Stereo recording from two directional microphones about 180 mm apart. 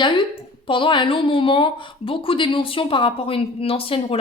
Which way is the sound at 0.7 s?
30° left (ahead or behind).